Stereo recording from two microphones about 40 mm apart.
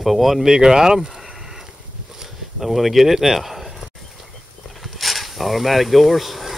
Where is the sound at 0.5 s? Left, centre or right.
Centre.